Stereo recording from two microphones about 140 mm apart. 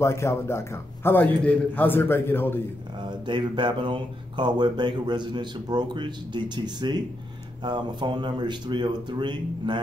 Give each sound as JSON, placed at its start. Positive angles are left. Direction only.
{"t": 0.0, "sound": "a man's voice", "side_deg": 20}
{"t": 3.0, "sound": "speech", "side_deg": -35}